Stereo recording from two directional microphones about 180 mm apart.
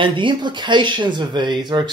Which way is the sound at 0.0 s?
25° right (ahead or behind).